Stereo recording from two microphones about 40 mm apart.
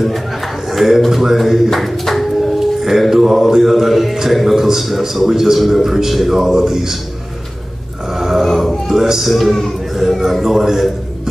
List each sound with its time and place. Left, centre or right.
0.0 s a man's voice: centre
1.7 s a sound: centre
2.6 s mantra: centre
4.6 s speech: centre
8.1 s a sound: centre
9.3 s mantra: centre
9.9 s speech: centre